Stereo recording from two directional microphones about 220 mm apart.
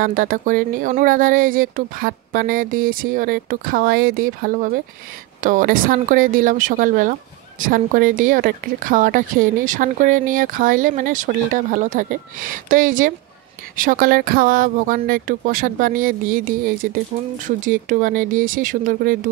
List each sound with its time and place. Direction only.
0.0 s a woman's voice: 40° right (ahead or behind)